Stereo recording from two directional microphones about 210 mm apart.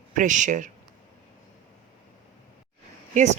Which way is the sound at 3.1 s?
35° right (ahead or behind).